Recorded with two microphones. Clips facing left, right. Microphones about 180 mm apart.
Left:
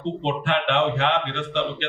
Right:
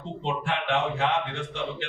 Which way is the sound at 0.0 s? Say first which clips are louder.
Left 5 dB; 70° left (ahead or behind).